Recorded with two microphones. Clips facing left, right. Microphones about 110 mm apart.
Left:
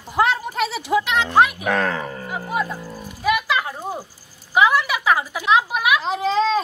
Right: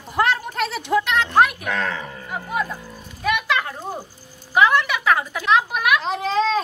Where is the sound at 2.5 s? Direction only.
5° left (ahead or behind).